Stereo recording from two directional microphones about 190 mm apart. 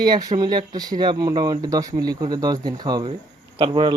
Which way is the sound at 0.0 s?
20° right (ahead or behind).